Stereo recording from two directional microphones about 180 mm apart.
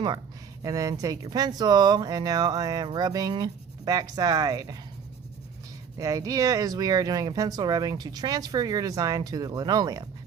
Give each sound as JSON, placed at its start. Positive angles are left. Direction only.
{"t": 0.6, "sound": "speech", "side_deg": -20}
{"t": 6.0, "sound": "speech", "side_deg": -20}